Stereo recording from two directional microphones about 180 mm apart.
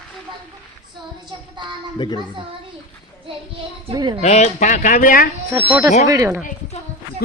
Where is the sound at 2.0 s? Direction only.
25° left (ahead or behind).